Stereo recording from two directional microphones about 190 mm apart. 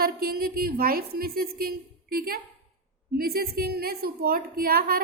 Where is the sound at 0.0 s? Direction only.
50° right (ahead or behind).